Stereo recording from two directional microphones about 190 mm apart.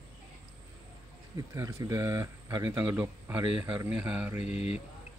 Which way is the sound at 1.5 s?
20° right (ahead or behind).